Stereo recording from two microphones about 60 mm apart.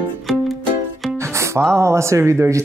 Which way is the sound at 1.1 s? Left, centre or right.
Right.